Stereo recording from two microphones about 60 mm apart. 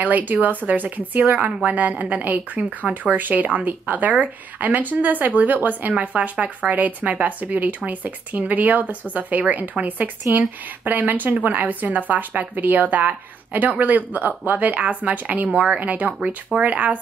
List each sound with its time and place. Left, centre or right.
0.0 s a woman's voice: right